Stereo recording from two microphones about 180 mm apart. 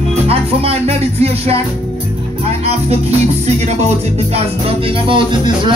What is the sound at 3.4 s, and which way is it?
Music, 40° right (ahead or behind).